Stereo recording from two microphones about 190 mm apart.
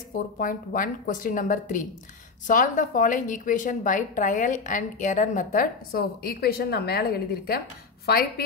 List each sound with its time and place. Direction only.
0.1 s a woman's voice: 45° left (ahead or behind)